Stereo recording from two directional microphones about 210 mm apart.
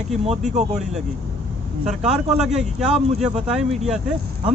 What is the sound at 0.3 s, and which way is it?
Speech, 30° right (ahead or behind).